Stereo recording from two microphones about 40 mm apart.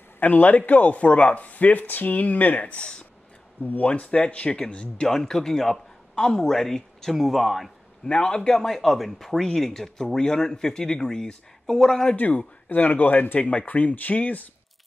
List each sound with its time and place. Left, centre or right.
0.2 s speech: left
2.6 s speech: left
3.6 s speech: left
5.0 s speech: centre
8.0 s speech: centre
12.2 s speech: left